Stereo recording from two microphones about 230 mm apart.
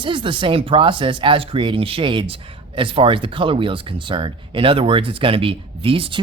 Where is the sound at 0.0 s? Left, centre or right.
Right.